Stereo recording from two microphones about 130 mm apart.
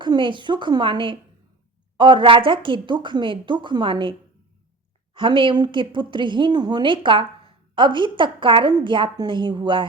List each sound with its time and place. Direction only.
0.0 s speech: 35° right (ahead or behind)
5.1 s speech: 40° right (ahead or behind)